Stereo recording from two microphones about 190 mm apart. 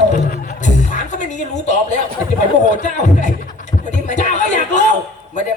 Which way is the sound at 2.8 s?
40° left (ahead or behind).